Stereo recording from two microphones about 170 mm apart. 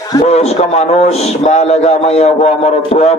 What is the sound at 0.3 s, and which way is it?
A man's voice, 40° left (ahead or behind).